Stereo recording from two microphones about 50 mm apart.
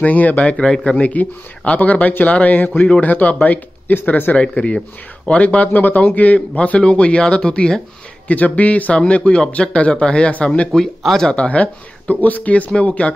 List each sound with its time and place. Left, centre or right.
0.0 s speech: left
0.6 s a man's voice: centre
1.0 s speech: left
4.4 s speech: left
5.7 s speech: left; by 7.8 s centre
8.3 s speech: left
10.8 s a man's voice: centre
11.2 s speech: left